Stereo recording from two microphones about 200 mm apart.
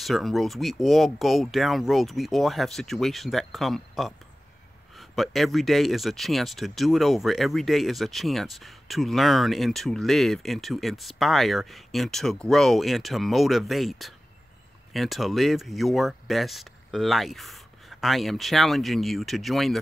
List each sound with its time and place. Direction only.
0.0 s speech: centre (ahead or behind)